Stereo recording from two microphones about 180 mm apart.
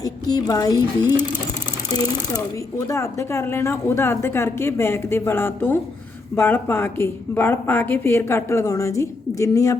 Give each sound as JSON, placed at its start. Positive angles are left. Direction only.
{"t": 0.0, "sound": "speech", "side_deg": 20}
{"t": 2.7, "sound": "speech", "side_deg": 20}